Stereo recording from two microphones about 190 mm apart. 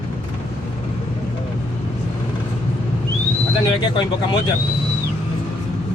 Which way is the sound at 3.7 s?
25° left (ahead or behind).